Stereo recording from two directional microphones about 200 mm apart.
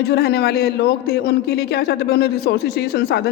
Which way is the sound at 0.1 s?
55° left (ahead or behind).